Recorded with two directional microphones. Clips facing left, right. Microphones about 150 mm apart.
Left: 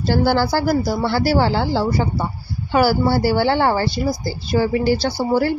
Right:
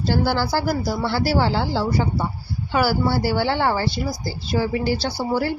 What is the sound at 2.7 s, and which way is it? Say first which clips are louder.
Speech: left 4 dB; 40° left (ahead or behind).